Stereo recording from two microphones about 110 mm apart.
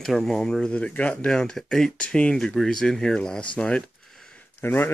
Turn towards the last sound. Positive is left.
turn(degrees=20)  # may be behind; listen again after turning